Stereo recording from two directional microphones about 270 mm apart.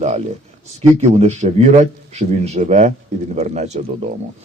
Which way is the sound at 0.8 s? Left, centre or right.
Right.